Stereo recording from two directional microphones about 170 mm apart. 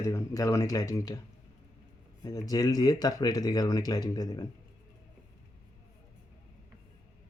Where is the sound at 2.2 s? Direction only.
20° left (ahead or behind).